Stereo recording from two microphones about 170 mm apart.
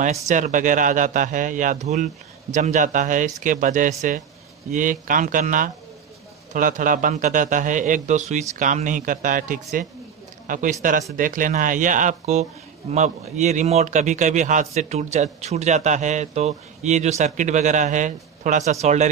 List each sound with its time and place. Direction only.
0.3 s speech: 45° right (ahead or behind)